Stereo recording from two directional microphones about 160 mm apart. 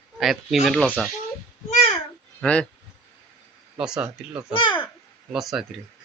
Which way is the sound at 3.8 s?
5° right (ahead or behind).